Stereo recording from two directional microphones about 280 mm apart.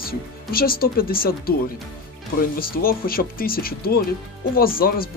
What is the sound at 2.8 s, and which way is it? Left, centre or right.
Speech, left.